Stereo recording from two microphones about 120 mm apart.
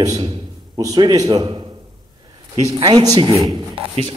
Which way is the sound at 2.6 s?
30° right (ahead or behind).